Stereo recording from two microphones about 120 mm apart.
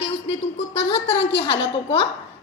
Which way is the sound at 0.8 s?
50° left (ahead or behind).